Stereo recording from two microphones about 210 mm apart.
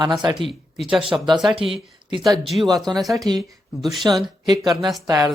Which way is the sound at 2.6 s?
15° right (ahead or behind).